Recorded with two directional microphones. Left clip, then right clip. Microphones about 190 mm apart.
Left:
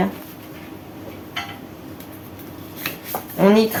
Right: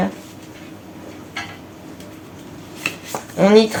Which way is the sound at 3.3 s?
40° right (ahead or behind).